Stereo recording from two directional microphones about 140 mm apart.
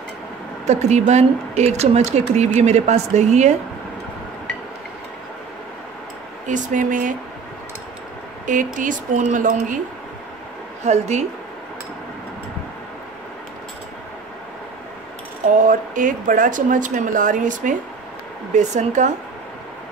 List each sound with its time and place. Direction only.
0.7 s speech: 55° right (ahead or behind)
6.4 s speech: 65° right (ahead or behind)
8.7 s speech: 70° right (ahead or behind)
10.8 s speech: 55° right (ahead or behind)
15.4 s speech: 70° right (ahead or behind)
18.5 s speech: 55° right (ahead or behind)